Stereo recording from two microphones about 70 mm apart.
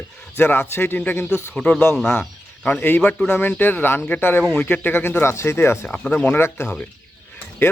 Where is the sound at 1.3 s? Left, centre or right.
Centre; by 5.9 s left.